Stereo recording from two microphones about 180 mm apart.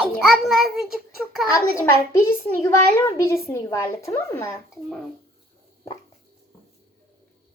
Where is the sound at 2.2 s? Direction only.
15° left (ahead or behind).